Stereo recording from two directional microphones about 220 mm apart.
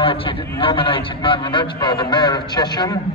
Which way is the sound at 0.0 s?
25° left (ahead or behind).